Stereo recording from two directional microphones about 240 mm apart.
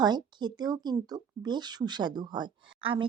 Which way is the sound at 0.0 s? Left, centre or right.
Centre.